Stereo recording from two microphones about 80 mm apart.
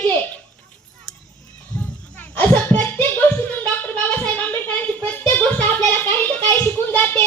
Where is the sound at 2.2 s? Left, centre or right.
Left.